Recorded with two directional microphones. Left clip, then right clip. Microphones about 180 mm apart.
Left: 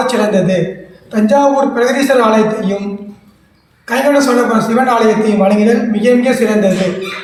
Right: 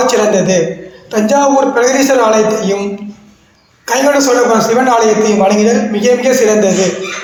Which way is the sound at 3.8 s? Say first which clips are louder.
Right 1 dB; 25° right (ahead or behind).